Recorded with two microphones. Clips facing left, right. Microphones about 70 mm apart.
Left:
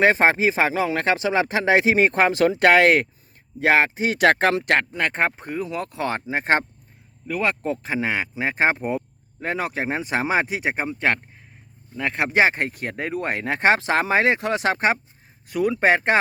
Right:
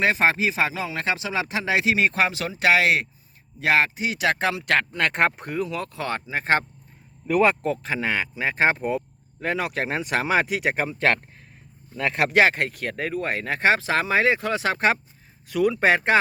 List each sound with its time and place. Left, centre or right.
0.0 s speech: left
0.7 s speech: left
3.6 s speech: left
4.9 s speech: centre
5.4 s speech: centre
6.0 s speech: left
7.3 s speech: centre
7.6 s speech: centre
10.5 s speech: centre; by 13.1 s left
13.1 s speech: left
15.8 s speech: left